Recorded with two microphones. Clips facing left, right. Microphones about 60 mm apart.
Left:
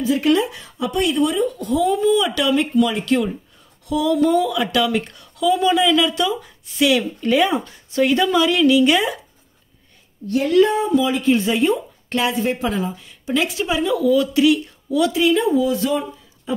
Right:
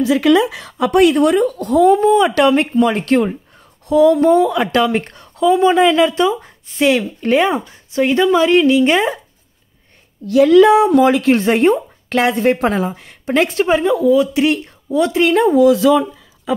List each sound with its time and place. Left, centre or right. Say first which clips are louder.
0.0 s a woman's voice: right 5 dB; right
3.8 s speech: right 7 dB; right
10.2 s speech: right 7 dB; right
11.4 s a woman's voice: right 5 dB; right
12.1 s a woman's voice: right 6 dB; right
14.4 s speech: even; right
15.1 s a woman's voice: right 7 dB; right